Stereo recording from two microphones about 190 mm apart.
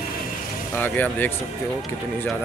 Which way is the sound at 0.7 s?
10° left (ahead or behind).